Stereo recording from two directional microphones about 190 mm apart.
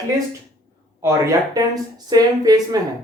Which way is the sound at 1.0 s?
20° right (ahead or behind).